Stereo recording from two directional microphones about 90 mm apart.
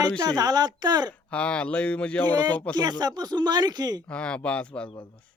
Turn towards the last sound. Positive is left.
turn(degrees=15)  # may be behind; listen again after turning